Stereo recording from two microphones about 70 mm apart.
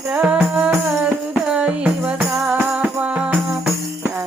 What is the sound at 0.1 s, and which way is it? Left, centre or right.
Music, centre.